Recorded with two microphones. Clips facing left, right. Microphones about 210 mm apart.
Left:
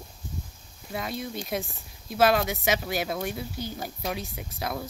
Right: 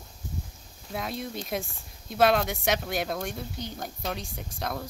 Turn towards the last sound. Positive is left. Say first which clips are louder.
# left 1 dB
turn(degrees=5)  # may be behind; listen again after turning